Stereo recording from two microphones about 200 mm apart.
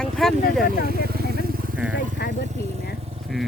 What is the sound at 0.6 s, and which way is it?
Speech, 50° left (ahead or behind).